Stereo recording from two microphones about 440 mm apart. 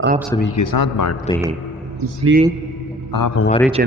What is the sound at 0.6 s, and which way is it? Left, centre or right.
Speech, left.